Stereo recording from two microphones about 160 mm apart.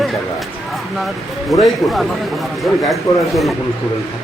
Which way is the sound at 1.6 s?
Centre (ahead or behind).